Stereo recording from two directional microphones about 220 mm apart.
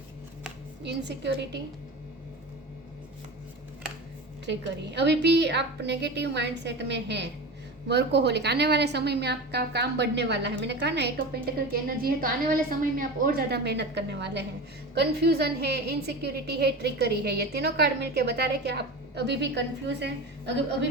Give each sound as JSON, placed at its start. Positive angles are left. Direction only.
{"t": 0.9, "sound": "a woman's voice", "side_deg": -50}
{"t": 4.4, "sound": "a woman's voice", "side_deg": -50}